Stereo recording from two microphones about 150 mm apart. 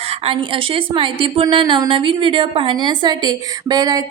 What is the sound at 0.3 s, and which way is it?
A woman's voice, 35° right (ahead or behind).